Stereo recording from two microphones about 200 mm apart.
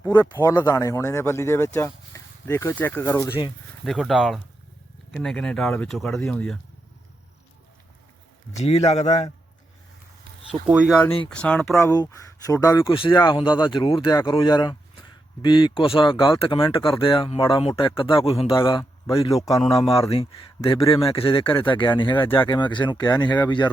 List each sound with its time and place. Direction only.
0.0 s speech: 15° left (ahead or behind)
3.8 s speech: centre (ahead or behind)
8.5 s a man's voice: 30° left (ahead or behind)
10.7 s speech: 5° right (ahead or behind)
11.3 s speech: 5° left (ahead or behind); by 23.6 s 20° left (ahead or behind)